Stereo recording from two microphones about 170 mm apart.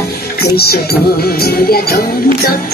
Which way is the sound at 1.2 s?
65° left (ahead or behind).